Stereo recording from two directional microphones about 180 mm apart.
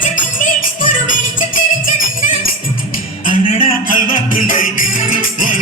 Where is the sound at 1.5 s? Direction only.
50° left (ahead or behind).